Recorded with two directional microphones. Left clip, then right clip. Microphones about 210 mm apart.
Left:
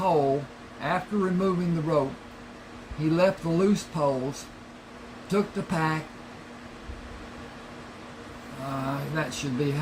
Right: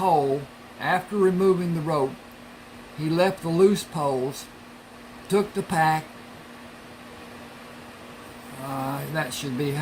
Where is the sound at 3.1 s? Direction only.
45° right (ahead or behind).